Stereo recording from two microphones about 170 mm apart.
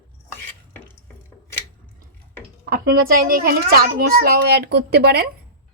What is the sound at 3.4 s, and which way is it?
Speech, 60° right (ahead or behind).